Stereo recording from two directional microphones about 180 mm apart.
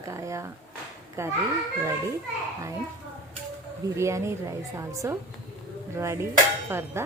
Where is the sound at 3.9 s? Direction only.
15° right (ahead or behind).